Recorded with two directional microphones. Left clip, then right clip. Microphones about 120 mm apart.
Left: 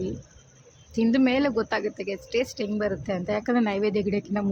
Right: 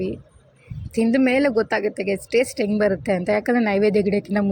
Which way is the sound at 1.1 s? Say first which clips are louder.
Right 5 dB; 20° right (ahead or behind).